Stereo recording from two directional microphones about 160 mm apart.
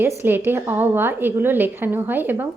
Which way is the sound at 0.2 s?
15° right (ahead or behind).